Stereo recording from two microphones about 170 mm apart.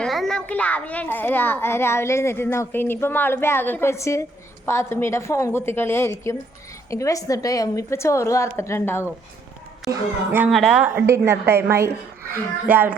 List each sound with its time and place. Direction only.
0.0 s a child's voice: centre (ahead or behind)
9.9 s a woman's voice: 10° right (ahead or behind)
10.5 s a woman's voice: centre (ahead or behind)